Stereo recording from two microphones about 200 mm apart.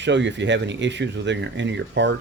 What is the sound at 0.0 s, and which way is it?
Speech, 60° right (ahead or behind).